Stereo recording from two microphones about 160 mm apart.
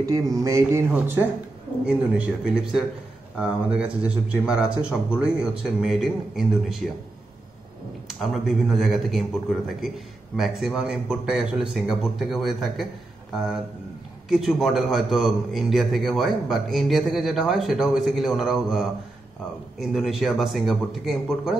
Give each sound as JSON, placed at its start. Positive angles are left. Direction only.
{"t": 0.0, "sound": "speech", "side_deg": -20}
{"t": 1.9, "sound": "a man's voice", "side_deg": -5}
{"t": 8.1, "sound": "a man's voice", "side_deg": 0}
{"t": 14.3, "sound": "a man's voice", "side_deg": 0}